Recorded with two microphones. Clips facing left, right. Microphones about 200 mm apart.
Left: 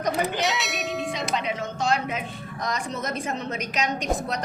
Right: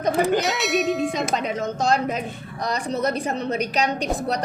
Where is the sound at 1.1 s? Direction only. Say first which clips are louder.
Right 4 dB; 50° right (ahead or behind).